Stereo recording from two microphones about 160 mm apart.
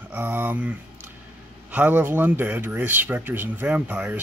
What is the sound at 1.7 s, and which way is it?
Speech, 10° right (ahead or behind).